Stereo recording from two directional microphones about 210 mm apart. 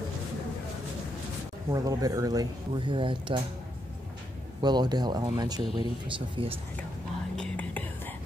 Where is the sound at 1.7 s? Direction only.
15° right (ahead or behind).